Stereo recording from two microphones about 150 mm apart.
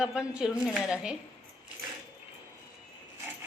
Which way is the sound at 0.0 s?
5° right (ahead or behind).